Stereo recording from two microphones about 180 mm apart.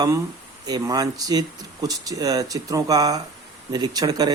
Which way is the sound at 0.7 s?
20° right (ahead or behind).